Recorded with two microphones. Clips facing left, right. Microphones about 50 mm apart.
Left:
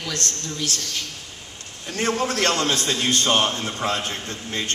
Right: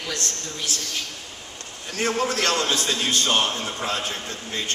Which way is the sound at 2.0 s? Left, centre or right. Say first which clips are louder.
Left 1 dB; left.